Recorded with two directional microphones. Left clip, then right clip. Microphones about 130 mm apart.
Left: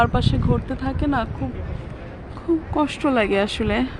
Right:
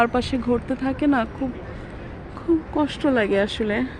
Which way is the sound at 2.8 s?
15° left (ahead or behind).